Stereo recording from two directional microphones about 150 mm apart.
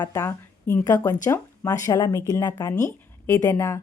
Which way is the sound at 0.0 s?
25° left (ahead or behind).